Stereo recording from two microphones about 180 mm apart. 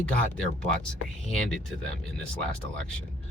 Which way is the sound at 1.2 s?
5° left (ahead or behind).